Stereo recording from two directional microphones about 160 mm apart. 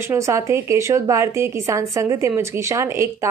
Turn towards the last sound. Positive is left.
turn(degrees=-15)  # may be behind; listen again after turning